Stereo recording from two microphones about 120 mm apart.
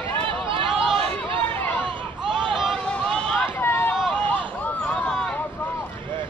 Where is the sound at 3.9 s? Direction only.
Centre (ahead or behind).